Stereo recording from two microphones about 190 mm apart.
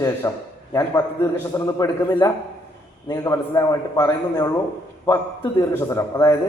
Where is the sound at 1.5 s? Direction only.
20° left (ahead or behind).